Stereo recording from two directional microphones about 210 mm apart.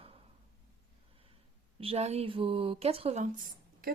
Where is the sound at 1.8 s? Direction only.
30° right (ahead or behind).